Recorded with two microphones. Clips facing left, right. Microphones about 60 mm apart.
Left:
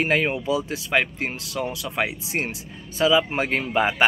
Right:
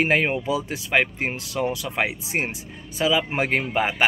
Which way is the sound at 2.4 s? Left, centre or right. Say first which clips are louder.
Right 1 dB; centre.